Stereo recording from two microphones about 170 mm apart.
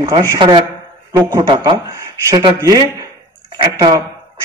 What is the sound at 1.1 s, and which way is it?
A man's voice, 20° right (ahead or behind).